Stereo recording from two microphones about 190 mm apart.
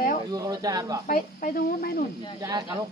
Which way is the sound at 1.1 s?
50° left (ahead or behind).